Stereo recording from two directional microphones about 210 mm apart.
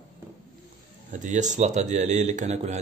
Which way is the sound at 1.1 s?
35° right (ahead or behind).